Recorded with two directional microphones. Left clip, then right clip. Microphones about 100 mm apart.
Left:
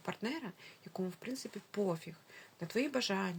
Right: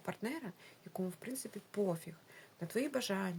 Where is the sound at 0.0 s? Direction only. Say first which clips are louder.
Left 2 dB; 40° right (ahead or behind).